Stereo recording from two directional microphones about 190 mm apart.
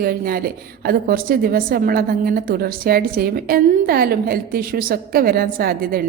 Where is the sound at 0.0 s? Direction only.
50° right (ahead or behind).